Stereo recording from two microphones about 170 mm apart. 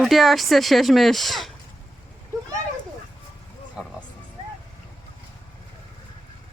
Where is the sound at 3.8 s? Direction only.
5° right (ahead or behind).